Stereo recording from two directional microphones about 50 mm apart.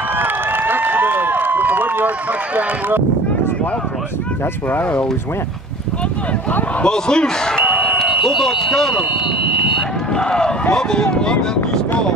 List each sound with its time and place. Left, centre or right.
0.2 s a sound: right
6.8 s speech: centre
7.6 s a sound: right
8.4 s speech: centre
10.1 s run: centre
10.7 s speech: centre